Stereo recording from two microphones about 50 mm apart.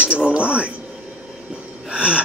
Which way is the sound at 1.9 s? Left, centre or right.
Right.